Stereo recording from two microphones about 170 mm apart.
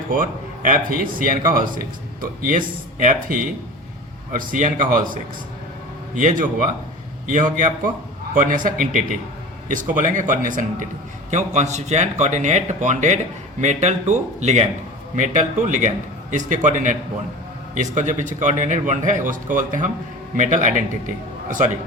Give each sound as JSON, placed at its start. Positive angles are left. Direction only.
{"t": 0.1, "sound": "a man's voice", "side_deg": -55}